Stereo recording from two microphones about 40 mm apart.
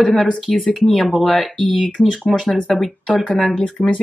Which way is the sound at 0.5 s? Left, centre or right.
Left.